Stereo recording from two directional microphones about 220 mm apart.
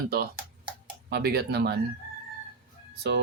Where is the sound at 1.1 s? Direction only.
45° right (ahead or behind).